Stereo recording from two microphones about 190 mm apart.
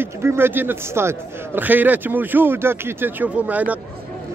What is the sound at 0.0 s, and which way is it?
A man's voice, 10° right (ahead or behind).